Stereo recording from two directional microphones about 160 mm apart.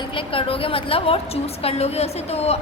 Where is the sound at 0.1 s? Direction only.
35° left (ahead or behind).